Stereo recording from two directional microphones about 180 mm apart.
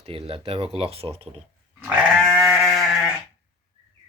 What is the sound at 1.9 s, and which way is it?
Sheep, 5° right (ahead or behind).